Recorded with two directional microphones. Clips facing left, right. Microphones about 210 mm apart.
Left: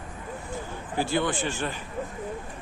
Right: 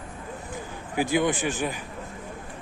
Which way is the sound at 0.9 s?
15° right (ahead or behind).